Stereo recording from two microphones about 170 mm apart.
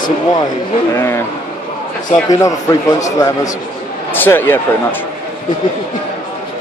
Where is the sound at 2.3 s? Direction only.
20° left (ahead or behind).